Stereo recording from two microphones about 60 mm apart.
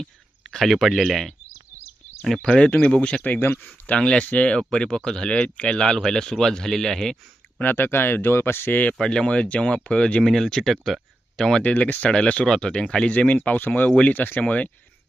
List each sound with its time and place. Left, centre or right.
0.0 s a sound: centre
0.8 s speech: centre
2.6 s speech: left
2.9 s speech: centre
3.2 s speech: left
3.9 s speech: centre
7.6 s speech: left
9.0 s speech: centre
11.3 s speech: centre